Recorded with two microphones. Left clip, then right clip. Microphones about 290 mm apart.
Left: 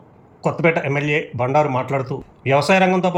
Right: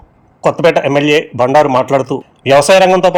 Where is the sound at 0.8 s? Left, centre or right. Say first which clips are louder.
Right 10 dB; centre.